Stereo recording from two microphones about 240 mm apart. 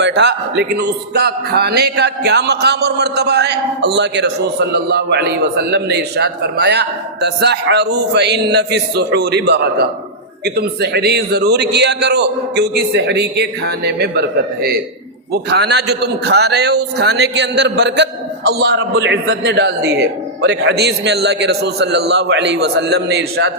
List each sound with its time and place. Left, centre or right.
0.0 s a man's voice: right